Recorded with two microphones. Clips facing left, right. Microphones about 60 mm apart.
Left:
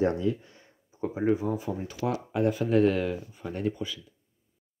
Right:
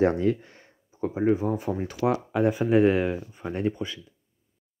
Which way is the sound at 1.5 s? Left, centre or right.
Right.